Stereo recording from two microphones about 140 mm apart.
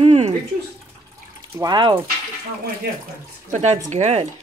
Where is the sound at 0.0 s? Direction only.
50° right (ahead or behind).